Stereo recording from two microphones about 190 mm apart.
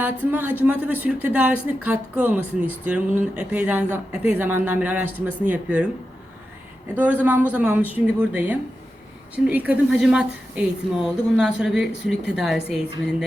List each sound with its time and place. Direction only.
0.0 s speech: 10° right (ahead or behind)
6.9 s a woman's voice: 10° right (ahead or behind)